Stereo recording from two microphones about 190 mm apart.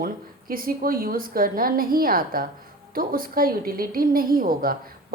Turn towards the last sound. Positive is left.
turn(degrees=-50)  # may be behind; listen again after turning